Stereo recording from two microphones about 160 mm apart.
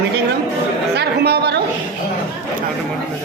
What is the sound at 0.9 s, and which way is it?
Speech, 90° right.